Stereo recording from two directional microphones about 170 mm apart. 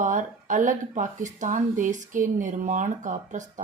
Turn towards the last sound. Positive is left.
turn(degrees=-45)  # may be behind; listen again after turning